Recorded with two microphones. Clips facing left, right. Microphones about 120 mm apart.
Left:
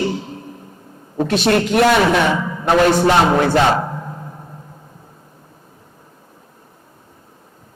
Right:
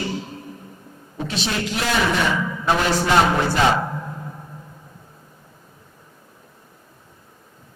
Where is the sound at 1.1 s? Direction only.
55° left (ahead or behind).